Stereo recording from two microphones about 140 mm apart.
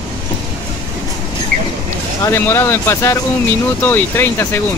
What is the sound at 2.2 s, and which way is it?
Speech, 20° left (ahead or behind).